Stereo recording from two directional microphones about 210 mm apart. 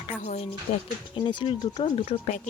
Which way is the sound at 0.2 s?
35° left (ahead or behind).